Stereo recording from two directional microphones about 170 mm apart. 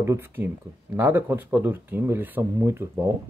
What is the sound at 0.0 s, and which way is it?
Speech, 15° right (ahead or behind).